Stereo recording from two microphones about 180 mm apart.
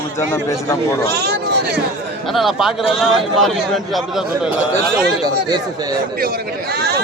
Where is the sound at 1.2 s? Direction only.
65° right (ahead or behind).